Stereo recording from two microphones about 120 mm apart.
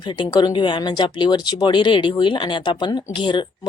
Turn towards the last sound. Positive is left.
turn(degrees=40)  # may be behind; listen again after turning